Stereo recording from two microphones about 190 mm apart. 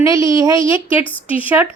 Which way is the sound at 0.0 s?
15° right (ahead or behind).